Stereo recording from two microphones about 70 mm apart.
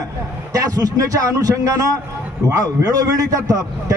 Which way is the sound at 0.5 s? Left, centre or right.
Right.